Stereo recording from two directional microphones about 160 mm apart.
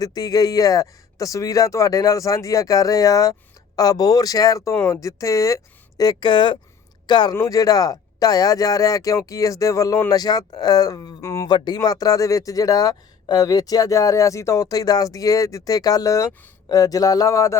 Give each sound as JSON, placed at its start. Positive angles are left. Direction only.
{"t": 0.0, "sound": "speech", "side_deg": 25}